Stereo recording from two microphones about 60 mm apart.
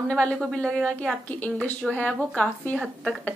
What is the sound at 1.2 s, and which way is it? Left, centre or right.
Speech, left.